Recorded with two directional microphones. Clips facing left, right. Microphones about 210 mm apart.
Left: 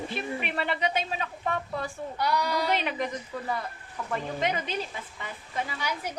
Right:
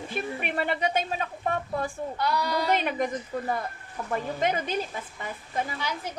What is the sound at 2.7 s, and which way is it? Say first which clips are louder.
A woman's voice: right 3 dB; 50° right (ahead or behind).